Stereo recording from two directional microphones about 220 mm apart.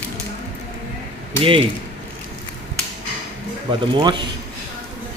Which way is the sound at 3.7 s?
20° right (ahead or behind).